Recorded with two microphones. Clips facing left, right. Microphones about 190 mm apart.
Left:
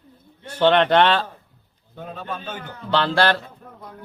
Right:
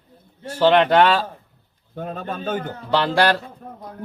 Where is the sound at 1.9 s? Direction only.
50° right (ahead or behind).